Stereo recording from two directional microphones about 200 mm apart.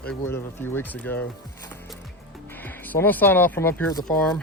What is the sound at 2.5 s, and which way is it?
Speech, 10° left (ahead or behind).